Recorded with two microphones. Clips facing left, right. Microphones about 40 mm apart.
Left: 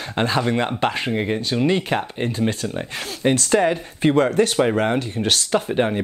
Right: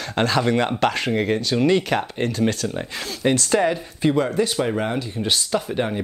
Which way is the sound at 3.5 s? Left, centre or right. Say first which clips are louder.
Left 2 dB; left.